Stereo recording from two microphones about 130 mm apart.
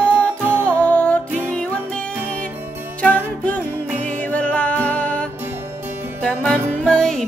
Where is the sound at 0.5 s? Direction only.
20° right (ahead or behind).